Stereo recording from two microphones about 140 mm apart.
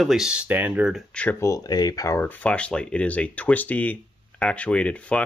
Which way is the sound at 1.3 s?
25° left (ahead or behind).